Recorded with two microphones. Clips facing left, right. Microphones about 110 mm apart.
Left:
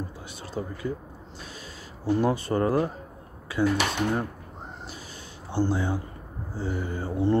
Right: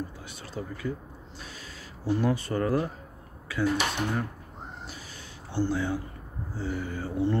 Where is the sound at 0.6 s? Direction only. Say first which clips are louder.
Left 4 dB; 30° left (ahead or behind).